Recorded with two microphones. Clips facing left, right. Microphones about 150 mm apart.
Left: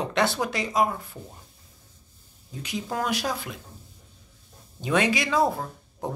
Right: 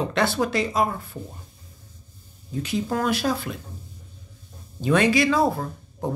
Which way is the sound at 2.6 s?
15° left (ahead or behind).